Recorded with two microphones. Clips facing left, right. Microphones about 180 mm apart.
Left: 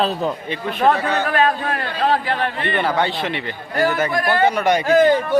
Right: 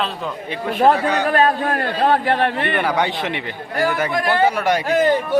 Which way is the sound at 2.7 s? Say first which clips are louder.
Even; 10° right (ahead or behind).